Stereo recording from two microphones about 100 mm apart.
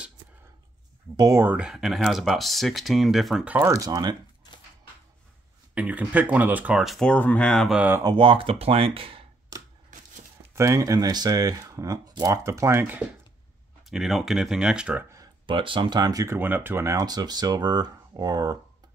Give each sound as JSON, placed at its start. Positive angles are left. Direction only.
{"t": 1.1, "sound": "speech", "side_deg": -40}
{"t": 1.6, "sound": "speech", "side_deg": -5}
{"t": 3.6, "sound": "speech", "side_deg": -35}
{"t": 5.8, "sound": "speech", "side_deg": -15}
{"t": 6.8, "sound": "speech", "side_deg": 0}
{"t": 7.1, "sound": "speech", "side_deg": 15}
{"t": 8.0, "sound": "speech", "side_deg": -50}
{"t": 10.5, "sound": "speech", "side_deg": -30}
{"t": 13.8, "sound": "speech", "side_deg": -5}
{"t": 15.4, "sound": "speech", "side_deg": -55}
{"t": 16.3, "sound": "speech", "side_deg": -20}